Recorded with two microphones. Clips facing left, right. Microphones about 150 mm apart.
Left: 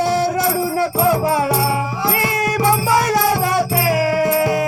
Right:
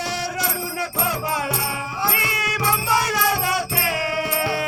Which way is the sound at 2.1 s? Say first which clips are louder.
Left 8 dB; 45° left (ahead or behind).